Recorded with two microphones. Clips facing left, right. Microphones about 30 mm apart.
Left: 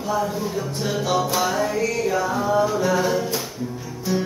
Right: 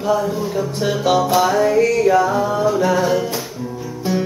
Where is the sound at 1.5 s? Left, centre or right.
Right.